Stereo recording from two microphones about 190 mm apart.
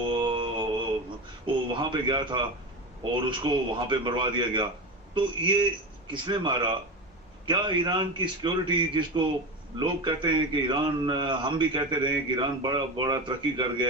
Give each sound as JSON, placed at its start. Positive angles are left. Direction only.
{"t": 0.0, "sound": "mantra", "side_deg": -25}
{"t": 1.7, "sound": "a man's voice", "side_deg": -25}